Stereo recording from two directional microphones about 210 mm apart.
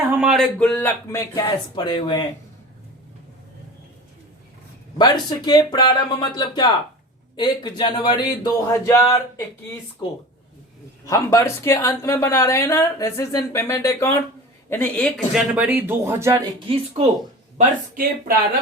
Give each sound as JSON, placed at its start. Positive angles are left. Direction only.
{"t": 0.2, "sound": "speech", "side_deg": 0}
{"t": 4.9, "sound": "speech", "side_deg": 20}
{"t": 11.0, "sound": "speech", "side_deg": 15}
{"t": 15.3, "sound": "speech", "side_deg": -5}
{"t": 17.9, "sound": "speech", "side_deg": -45}